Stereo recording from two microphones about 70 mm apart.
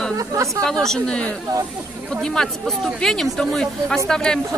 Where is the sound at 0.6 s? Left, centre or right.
Centre.